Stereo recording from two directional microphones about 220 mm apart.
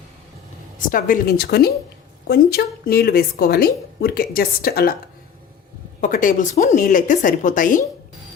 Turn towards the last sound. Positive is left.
turn(degrees=35)  # may be behind; listen again after turning